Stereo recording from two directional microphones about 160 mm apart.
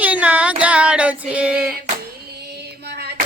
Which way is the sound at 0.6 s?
5° right (ahead or behind).